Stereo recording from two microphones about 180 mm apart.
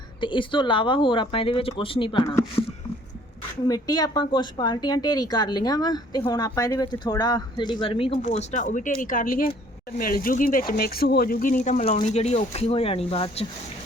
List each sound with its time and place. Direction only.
0.2 s speech: 25° left (ahead or behind)
3.7 s speech: 20° left (ahead or behind)